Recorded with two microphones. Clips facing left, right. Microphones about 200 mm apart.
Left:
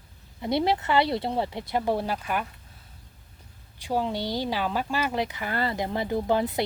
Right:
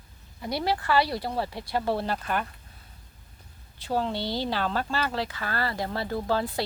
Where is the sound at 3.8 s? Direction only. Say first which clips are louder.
Left 1 dB; 15° left (ahead or behind).